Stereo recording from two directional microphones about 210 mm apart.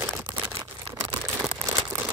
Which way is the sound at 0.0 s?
5° right (ahead or behind).